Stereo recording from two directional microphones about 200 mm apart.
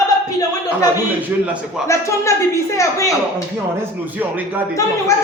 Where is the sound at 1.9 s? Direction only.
15° left (ahead or behind).